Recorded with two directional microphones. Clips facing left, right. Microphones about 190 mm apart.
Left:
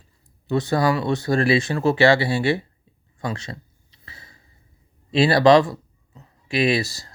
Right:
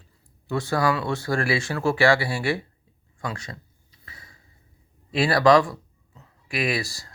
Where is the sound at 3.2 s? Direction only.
25° left (ahead or behind).